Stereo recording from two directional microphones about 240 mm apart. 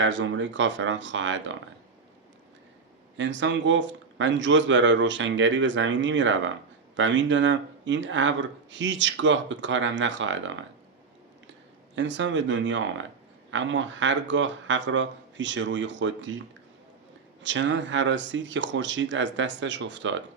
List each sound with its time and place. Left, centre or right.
0.0 s speech: right
3.2 s speech: right
11.9 s speech: right
17.4 s speech: right